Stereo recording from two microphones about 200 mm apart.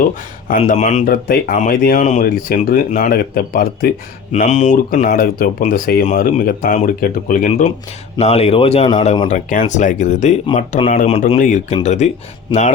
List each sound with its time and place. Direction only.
0.6 s speech: 35° left (ahead or behind)
4.3 s speech: 35° left (ahead or behind)
9.2 s speech: 40° left (ahead or behind)